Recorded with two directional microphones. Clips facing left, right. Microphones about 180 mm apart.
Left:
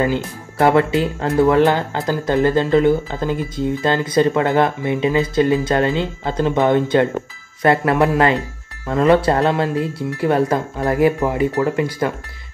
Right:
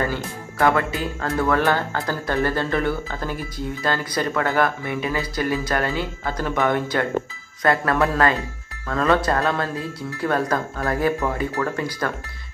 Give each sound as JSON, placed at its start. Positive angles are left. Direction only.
{"t": 0.0, "sound": "speech", "side_deg": 20}